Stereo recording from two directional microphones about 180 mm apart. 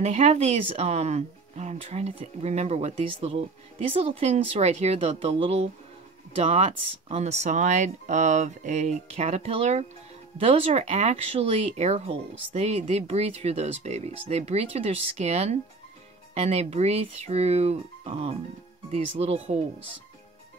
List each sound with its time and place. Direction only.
0.0 s speech: 35° right (ahead or behind)